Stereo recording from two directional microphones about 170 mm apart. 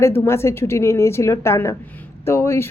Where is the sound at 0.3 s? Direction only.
15° left (ahead or behind).